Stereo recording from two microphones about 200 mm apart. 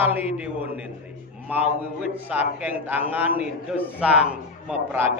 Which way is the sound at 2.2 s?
5° right (ahead or behind).